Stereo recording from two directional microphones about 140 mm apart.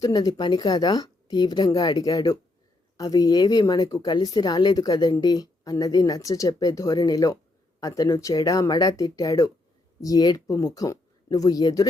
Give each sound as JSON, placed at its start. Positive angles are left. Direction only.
{"t": 0.0, "sound": "speech", "side_deg": 25}